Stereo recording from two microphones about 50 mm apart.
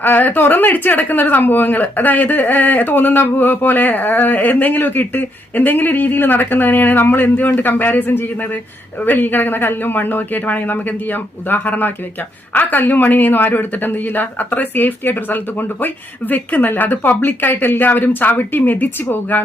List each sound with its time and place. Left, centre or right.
0.0 s speech: left